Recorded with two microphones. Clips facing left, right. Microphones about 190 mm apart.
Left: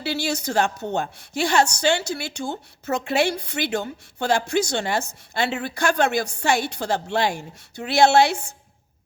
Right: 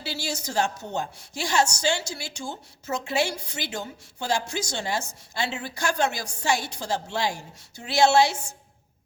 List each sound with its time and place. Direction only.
0.0 s a woman's voice: 60° left (ahead or behind)